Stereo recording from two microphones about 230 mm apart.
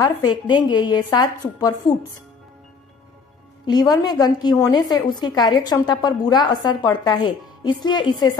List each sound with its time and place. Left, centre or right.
0.0 s a woman's voice: centre
3.6 s a woman's voice: centre